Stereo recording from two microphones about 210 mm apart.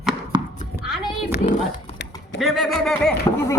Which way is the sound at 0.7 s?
10° right (ahead or behind).